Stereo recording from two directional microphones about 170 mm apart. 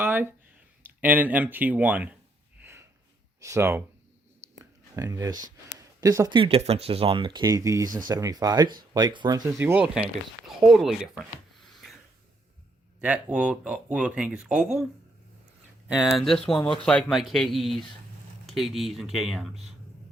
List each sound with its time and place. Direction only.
0.0 s a sound: 10° right (ahead or behind)
0.8 s speech: 10° right (ahead or behind)
2.6 s snort: 15° right (ahead or behind)
3.4 s speech: 15° right (ahead or behind)
4.5 s a sound: 20° right (ahead or behind)
5.7 s speech: 20° right (ahead or behind)
10.6 s a sound: centre (ahead or behind)
13.0 s speech: 10° right (ahead or behind)
15.9 s speech: 5° right (ahead or behind)